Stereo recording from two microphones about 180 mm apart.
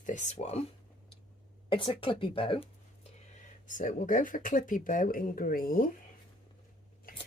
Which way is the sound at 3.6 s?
45° left (ahead or behind).